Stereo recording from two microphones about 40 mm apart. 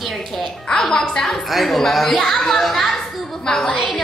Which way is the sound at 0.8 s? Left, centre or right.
Centre.